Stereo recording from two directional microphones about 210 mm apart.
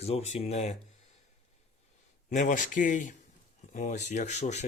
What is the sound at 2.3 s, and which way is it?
Speech, 40° left (ahead or behind).